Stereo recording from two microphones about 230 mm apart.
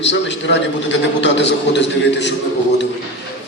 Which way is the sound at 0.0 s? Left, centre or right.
Left.